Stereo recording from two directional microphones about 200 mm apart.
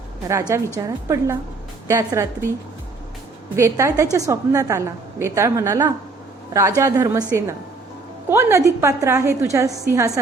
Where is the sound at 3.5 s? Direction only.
15° right (ahead or behind).